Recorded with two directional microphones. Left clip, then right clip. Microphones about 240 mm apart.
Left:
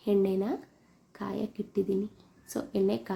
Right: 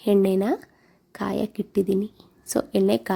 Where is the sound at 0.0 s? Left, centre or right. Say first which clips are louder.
Right 7 dB; right.